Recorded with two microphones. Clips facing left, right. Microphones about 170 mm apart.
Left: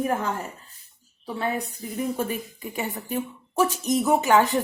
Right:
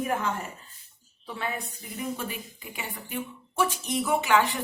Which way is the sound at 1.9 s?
45° left (ahead or behind).